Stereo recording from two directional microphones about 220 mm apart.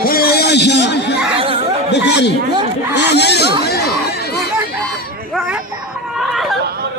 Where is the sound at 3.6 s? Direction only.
45° left (ahead or behind).